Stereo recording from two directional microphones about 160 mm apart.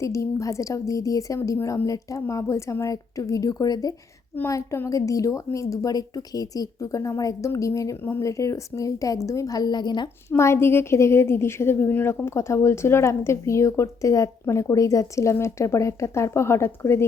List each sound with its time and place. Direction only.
0.0 s a woman's voice: 20° left (ahead or behind)
10.2 s a woman's voice: 15° left (ahead or behind)